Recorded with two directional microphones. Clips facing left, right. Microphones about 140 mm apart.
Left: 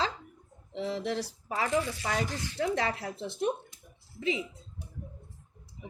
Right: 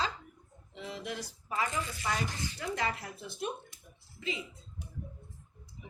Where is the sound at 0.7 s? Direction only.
70° left (ahead or behind).